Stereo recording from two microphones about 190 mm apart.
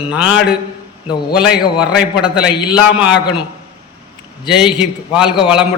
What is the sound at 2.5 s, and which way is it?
Speech, 25° left (ahead or behind).